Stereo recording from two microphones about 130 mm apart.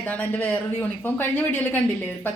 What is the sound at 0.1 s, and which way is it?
A woman's voice, 15° left (ahead or behind).